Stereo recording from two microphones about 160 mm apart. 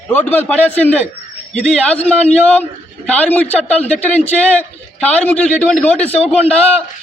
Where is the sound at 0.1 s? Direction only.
10° left (ahead or behind).